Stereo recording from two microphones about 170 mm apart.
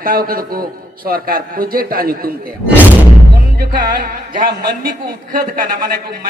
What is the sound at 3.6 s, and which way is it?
A man's voice, 55° right (ahead or behind).